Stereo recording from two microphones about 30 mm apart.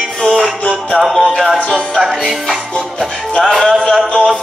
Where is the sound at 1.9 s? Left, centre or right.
Centre.